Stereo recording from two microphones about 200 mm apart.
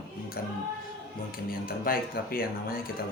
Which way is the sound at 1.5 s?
45° left (ahead or behind).